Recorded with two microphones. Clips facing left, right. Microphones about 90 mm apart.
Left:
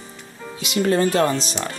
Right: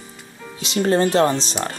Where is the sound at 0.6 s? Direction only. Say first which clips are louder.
Right 1 dB; 30° right (ahead or behind).